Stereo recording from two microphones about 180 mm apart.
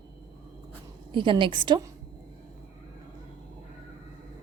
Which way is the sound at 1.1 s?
25° right (ahead or behind).